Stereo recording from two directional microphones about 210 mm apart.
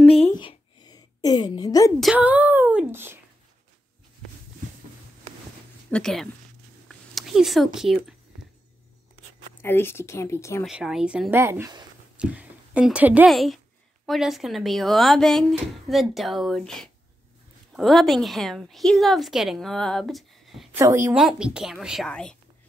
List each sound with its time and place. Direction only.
0.1 s a sound: 25° left (ahead or behind)
2.0 s speech: 5° right (ahead or behind)
5.9 s a woman's voice: 5° left (ahead or behind)
6.9 s a sound: centre (ahead or behind)
9.6 s speech: 10° left (ahead or behind)
10.6 s speech: centre (ahead or behind)
20.7 s speech: 10° right (ahead or behind); by 22.4 s 5° left (ahead or behind)